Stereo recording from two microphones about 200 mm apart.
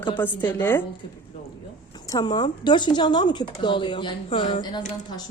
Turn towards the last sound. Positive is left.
turn(degrees=25)  # may be behind; listen again after turning